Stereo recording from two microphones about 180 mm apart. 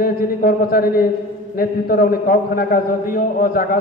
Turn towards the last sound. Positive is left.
turn(degrees=55)  # may be behind; listen again after turning